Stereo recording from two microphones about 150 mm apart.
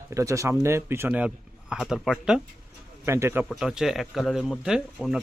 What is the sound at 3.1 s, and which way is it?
Speech, 15° right (ahead or behind).